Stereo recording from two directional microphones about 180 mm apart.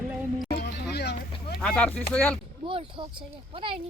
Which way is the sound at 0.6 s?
65° left (ahead or behind).